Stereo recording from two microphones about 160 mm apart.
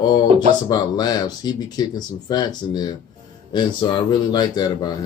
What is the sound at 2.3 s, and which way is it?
Speech, 25° left (ahead or behind).